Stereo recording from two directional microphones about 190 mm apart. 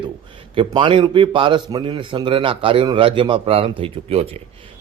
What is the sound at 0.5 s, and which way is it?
Speech, 25° right (ahead or behind).